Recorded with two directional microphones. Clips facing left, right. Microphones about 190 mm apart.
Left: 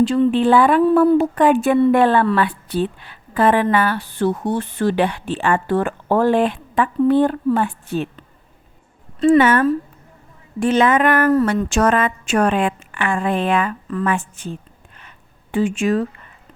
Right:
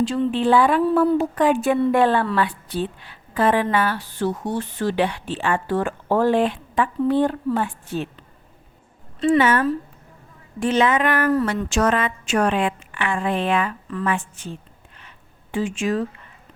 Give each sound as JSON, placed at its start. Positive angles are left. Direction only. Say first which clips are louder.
{"t": 0.0, "sound": "a woman's voice", "louder": "left 5 dB", "side_deg": 60}
{"t": 9.2, "sound": "a woman's voice", "louder": "left 4 dB", "side_deg": 50}
{"t": 15.5, "sound": "a woman's voice", "louder": "left 5 dB", "side_deg": 60}